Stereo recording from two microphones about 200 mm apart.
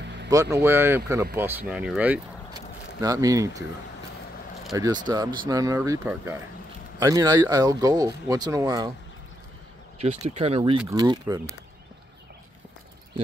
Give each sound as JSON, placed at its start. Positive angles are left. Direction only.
{"t": 0.0, "sound": "vehicle", "side_deg": -60}
{"t": 0.3, "sound": "speech", "side_deg": -15}
{"t": 2.5, "sound": "a sound", "side_deg": -20}
{"t": 4.7, "sound": "speech", "side_deg": -20}
{"t": 9.9, "sound": "speech", "side_deg": -30}
{"t": 10.8, "sound": "speech", "side_deg": -20}